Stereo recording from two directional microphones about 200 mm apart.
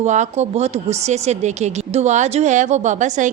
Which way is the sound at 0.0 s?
35° right (ahead or behind).